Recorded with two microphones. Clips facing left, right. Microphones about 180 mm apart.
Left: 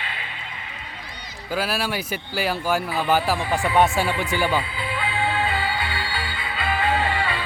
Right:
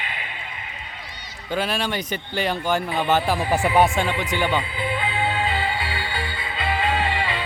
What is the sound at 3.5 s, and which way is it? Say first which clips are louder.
Speech: right 2 dB; 20° right (ahead or behind).